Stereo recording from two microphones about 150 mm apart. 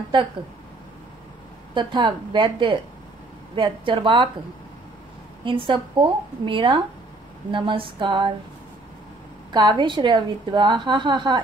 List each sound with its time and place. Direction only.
1.7 s a woman's voice: 35° right (ahead or behind)
5.4 s a woman's voice: 35° right (ahead or behind)
9.5 s a woman's voice: 30° right (ahead or behind)